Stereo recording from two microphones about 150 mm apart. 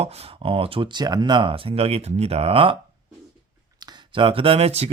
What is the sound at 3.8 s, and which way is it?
Speech, 30° right (ahead or behind).